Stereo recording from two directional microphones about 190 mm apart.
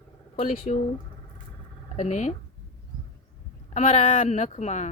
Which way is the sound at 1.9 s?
35° left (ahead or behind).